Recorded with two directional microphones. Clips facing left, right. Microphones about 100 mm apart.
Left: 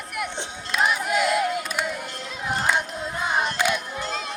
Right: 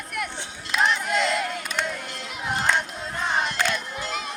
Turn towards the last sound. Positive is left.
turn(degrees=10)  # may be behind; listen again after turning